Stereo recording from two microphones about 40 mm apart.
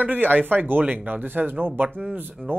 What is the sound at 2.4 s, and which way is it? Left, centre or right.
Speech, left.